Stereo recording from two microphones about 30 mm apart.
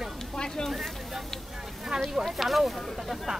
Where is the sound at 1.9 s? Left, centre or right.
Right.